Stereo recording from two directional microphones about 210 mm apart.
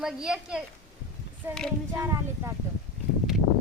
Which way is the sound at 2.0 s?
15° right (ahead or behind).